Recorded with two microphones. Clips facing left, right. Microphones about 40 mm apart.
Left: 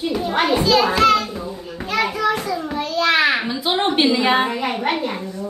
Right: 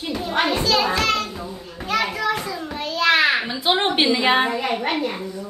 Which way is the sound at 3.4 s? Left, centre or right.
Centre.